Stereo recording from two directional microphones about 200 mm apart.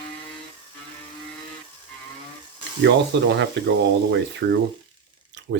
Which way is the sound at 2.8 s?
60° right (ahead or behind).